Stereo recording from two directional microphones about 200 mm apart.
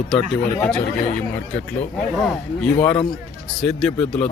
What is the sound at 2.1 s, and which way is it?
A man's voice, 5° left (ahead or behind).